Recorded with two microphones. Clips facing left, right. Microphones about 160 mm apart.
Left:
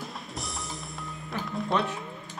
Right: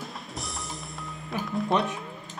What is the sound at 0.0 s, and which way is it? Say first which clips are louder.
Music: even; centre (ahead or behind).